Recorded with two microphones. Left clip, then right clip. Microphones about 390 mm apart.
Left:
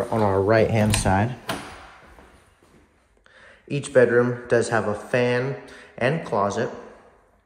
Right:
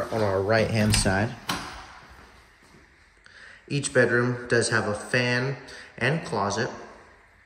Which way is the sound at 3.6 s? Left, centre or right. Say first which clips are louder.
Left 4 dB; centre.